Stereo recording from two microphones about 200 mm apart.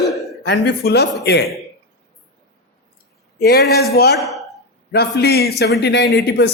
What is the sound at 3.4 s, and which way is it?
Speech, 55° left (ahead or behind).